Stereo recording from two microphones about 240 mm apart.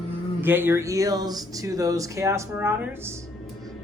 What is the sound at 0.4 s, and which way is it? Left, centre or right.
A woman's voice, centre.